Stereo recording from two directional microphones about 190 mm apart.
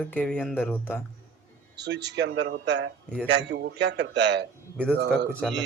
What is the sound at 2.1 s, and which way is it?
A man's voice, 65° right (ahead or behind).